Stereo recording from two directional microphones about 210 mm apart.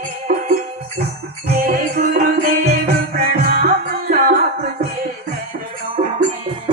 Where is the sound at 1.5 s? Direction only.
45° right (ahead or behind).